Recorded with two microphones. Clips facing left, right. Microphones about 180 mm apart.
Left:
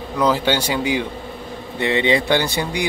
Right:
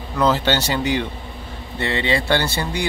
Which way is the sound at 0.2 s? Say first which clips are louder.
Even; 10° left (ahead or behind).